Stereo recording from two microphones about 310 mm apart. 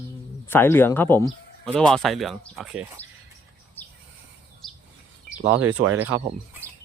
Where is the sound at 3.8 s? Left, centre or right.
Centre.